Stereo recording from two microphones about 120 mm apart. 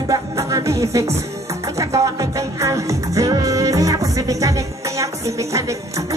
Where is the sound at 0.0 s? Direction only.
30° right (ahead or behind).